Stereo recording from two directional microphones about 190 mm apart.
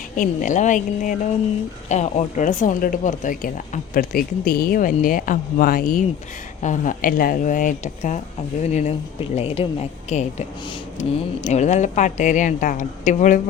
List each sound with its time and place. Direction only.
0.2 s speech: 40° left (ahead or behind)
11.4 s speech: 35° left (ahead or behind)